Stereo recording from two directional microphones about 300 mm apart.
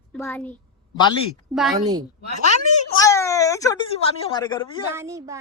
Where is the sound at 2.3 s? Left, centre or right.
Left.